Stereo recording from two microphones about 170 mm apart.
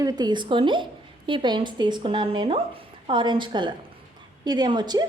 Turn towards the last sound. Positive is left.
turn(degrees=-25)  # may be behind; listen again after turning